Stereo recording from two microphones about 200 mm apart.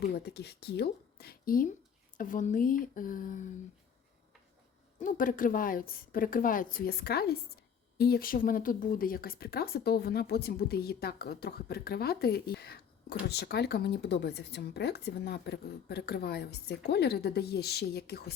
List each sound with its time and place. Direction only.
0.1 s a woman's voice: 55° left (ahead or behind)
4.9 s a woman's voice: 40° left (ahead or behind)